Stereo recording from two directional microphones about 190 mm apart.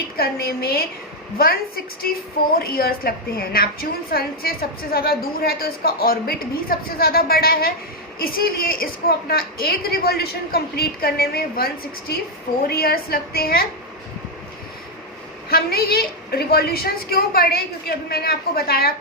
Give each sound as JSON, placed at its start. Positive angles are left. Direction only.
{"t": 0.2, "sound": "a woman's voice", "side_deg": 55}
{"t": 15.4, "sound": "a woman's voice", "side_deg": 55}